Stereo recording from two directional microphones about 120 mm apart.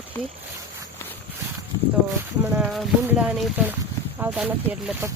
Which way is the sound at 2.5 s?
10° right (ahead or behind).